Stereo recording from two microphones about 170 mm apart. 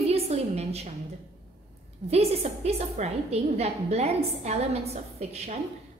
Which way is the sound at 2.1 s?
40° right (ahead or behind).